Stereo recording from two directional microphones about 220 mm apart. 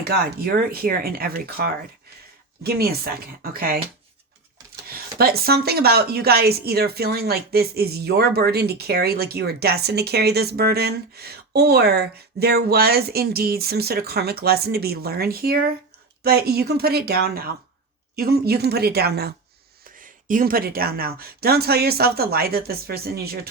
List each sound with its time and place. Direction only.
0.3 s speech: 40° right (ahead or behind)
4.9 s speech: 45° right (ahead or behind)